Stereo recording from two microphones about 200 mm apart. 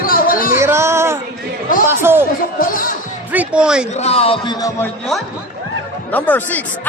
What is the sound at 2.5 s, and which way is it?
Music, 45° left (ahead or behind).